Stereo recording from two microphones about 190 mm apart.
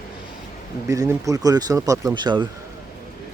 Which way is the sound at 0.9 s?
15° right (ahead or behind).